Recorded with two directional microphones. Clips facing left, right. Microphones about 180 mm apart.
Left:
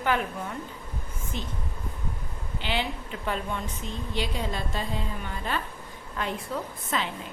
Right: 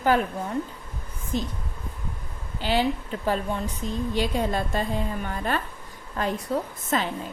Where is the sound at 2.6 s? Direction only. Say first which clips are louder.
Right 7 dB; 40° right (ahead or behind).